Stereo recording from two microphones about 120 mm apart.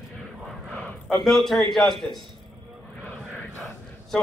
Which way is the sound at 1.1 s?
Centre (ahead or behind).